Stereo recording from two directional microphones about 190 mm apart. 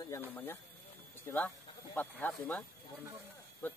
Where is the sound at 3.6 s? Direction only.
10° left (ahead or behind).